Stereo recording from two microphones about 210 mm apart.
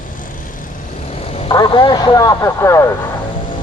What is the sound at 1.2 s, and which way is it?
Speech, 25° left (ahead or behind).